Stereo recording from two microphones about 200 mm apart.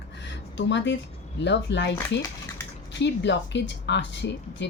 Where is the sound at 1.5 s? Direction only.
60° left (ahead or behind).